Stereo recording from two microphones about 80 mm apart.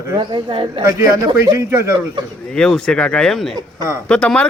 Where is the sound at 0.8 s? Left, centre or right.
Right.